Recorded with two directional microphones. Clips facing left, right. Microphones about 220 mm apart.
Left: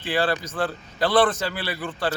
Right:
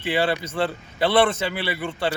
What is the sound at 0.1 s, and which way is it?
Speech, 25° right (ahead or behind).